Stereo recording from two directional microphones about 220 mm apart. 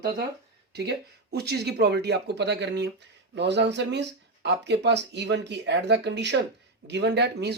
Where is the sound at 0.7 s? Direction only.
50° right (ahead or behind).